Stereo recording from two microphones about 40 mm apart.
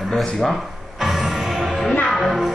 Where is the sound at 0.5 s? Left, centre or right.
Centre.